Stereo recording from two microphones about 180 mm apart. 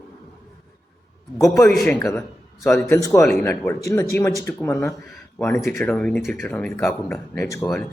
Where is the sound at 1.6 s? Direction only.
5° left (ahead or behind).